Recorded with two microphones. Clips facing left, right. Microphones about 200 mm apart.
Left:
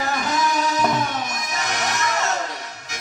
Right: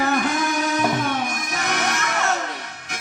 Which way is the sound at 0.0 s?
60° right (ahead or behind).